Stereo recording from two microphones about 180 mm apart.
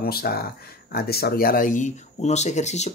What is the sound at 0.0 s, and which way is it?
Speech, 55° left (ahead or behind).